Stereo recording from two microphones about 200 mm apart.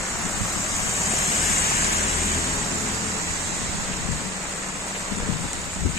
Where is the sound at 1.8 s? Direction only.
30° left (ahead or behind).